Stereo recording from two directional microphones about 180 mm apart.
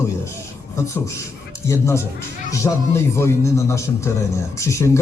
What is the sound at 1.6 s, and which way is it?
A man's voice, 15° left (ahead or behind).